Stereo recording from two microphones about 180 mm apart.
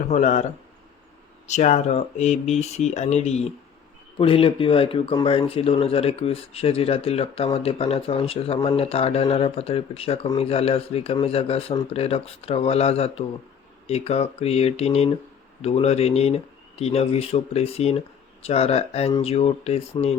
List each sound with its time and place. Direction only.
0.1 s speech: 45° left (ahead or behind)